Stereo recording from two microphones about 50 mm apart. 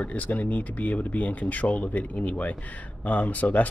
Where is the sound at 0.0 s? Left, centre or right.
Left.